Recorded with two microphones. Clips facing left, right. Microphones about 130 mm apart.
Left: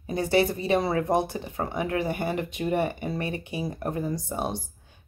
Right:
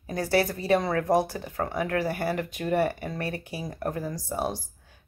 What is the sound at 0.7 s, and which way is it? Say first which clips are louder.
Speech: left 1 dB; 5° left (ahead or behind).